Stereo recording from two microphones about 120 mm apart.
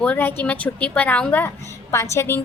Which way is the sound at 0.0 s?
15° left (ahead or behind).